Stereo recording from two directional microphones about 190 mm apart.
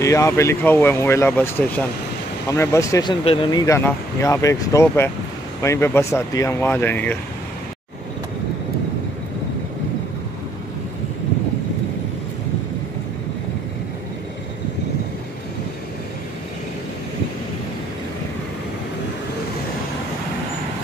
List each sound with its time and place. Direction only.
0.0 s speech: 15° left (ahead or behind)